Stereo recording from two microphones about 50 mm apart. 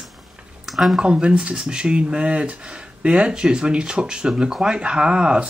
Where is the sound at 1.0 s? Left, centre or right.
Centre.